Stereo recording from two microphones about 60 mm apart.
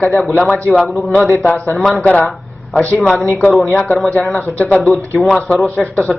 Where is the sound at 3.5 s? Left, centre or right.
Centre.